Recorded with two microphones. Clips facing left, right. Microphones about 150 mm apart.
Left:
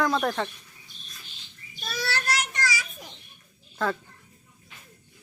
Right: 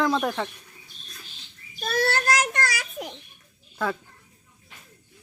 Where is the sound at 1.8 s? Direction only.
55° right (ahead or behind).